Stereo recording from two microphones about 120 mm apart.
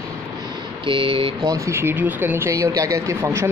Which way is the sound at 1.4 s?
25° right (ahead or behind).